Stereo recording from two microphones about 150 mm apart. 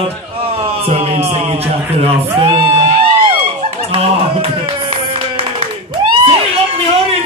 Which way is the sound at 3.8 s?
40° right (ahead or behind).